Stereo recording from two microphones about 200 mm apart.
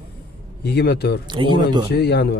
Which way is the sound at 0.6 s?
55° left (ahead or behind).